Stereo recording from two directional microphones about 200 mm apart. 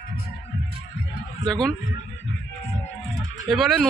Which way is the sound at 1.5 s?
5° left (ahead or behind).